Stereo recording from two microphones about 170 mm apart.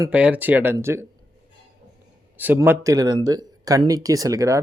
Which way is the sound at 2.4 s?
10° right (ahead or behind).